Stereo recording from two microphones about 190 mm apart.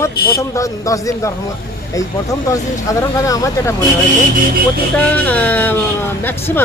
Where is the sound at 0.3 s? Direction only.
15° left (ahead or behind).